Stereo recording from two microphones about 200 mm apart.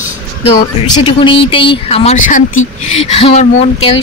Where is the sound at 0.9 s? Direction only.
25° left (ahead or behind).